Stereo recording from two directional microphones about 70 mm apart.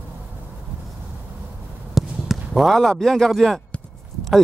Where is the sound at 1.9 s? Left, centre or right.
Centre.